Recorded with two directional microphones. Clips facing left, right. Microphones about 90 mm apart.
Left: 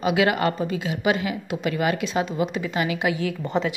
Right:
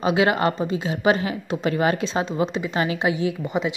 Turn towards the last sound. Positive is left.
turn(degrees=-15)  # may be behind; listen again after turning